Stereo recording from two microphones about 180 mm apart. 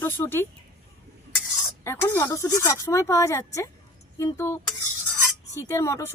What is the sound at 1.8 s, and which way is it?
Speech, 15° left (ahead or behind).